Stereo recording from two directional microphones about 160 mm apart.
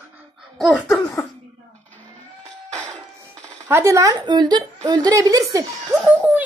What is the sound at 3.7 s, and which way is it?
A woman's voice, 15° right (ahead or behind).